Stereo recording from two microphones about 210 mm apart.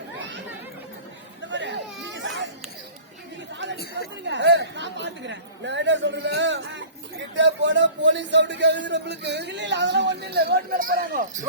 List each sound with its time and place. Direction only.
0.2 s chatter: 60° right (ahead or behind)
1.5 s children playing: 60° right (ahead or behind)
4.3 s speech: 55° right (ahead or behind); by 11.4 s 40° right (ahead or behind)